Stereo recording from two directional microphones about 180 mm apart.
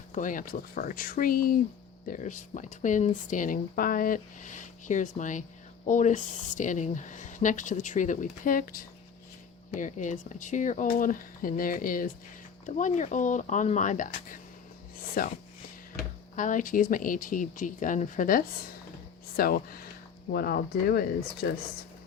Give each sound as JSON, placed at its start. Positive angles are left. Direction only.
{"t": 0.1, "sound": "speech", "side_deg": 45}